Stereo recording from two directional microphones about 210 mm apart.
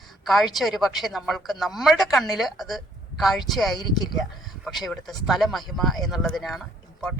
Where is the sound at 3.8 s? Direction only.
20° left (ahead or behind).